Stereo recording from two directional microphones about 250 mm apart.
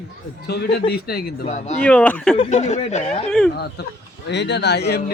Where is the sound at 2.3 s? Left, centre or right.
Left.